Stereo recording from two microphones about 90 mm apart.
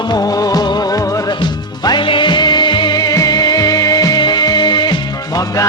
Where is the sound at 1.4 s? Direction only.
55° left (ahead or behind).